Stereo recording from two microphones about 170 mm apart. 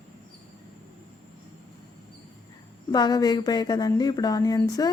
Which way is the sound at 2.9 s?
25° left (ahead or behind).